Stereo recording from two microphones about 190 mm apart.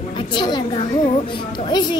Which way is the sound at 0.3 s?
25° left (ahead or behind).